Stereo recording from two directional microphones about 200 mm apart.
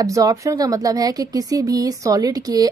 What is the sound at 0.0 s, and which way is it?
Speech, 15° right (ahead or behind).